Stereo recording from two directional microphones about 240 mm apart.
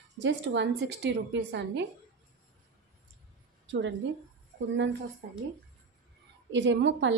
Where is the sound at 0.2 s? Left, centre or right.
Right.